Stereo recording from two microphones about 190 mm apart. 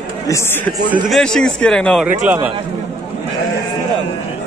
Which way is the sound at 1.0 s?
Centre (ahead or behind).